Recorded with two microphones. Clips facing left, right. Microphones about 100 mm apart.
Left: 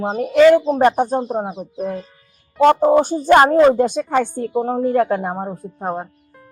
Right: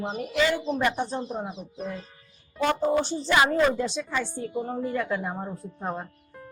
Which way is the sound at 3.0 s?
50° left (ahead or behind).